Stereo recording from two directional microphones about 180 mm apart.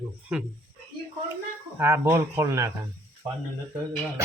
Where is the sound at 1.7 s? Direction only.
15° right (ahead or behind).